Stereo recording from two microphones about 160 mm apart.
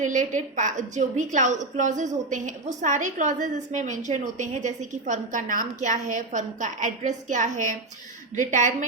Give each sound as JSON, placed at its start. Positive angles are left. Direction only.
{"t": 0.0, "sound": "a woman's voice", "side_deg": -50}